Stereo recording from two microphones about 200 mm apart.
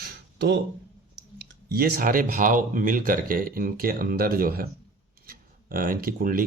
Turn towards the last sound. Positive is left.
turn(degrees=-45)  # may be behind; listen again after turning